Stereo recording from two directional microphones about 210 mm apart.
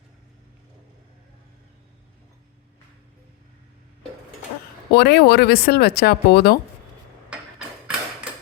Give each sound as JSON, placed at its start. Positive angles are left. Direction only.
{"t": 4.9, "sound": "speech", "side_deg": 50}